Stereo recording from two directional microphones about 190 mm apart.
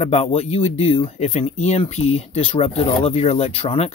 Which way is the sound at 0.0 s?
35° left (ahead or behind).